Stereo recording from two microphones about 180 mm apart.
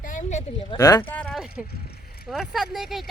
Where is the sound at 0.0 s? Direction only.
45° left (ahead or behind).